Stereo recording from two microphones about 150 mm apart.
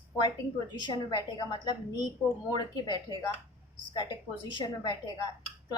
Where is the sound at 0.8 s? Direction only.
30° left (ahead or behind).